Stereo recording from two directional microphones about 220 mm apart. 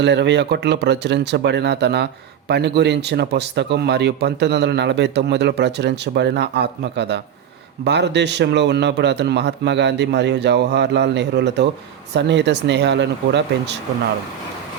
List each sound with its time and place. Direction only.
0.0 s speech: 50° right (ahead or behind)